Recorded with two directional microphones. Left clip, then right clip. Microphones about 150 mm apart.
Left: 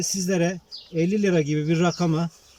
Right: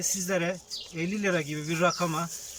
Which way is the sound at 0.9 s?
25° left (ahead or behind).